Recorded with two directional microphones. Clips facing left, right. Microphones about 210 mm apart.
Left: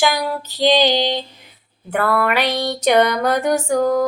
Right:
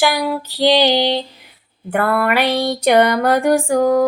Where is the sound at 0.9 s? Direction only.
65° right (ahead or behind).